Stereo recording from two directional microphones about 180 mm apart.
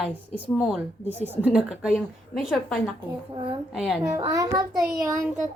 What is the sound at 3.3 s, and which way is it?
Speech, 25° right (ahead or behind).